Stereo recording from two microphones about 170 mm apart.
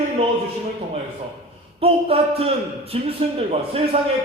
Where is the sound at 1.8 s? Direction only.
35° right (ahead or behind).